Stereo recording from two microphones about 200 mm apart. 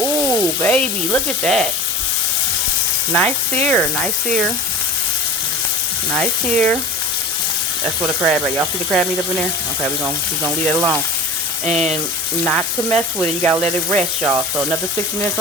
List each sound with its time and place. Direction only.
0.3 s frying: 5° left (ahead or behind)
3.2 s speech: 5° left (ahead or behind)
6.1 s speech: 5° left (ahead or behind)
8.2 s speech: 5° right (ahead or behind)
10.0 s speech: 10° right (ahead or behind)
11.7 s frying: 35° right (ahead or behind)
12.5 s speech: 5° left (ahead or behind)
14.3 s speech: 5° right (ahead or behind)